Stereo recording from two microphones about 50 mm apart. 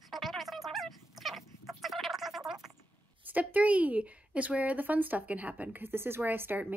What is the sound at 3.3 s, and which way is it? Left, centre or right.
A woman's voice, right.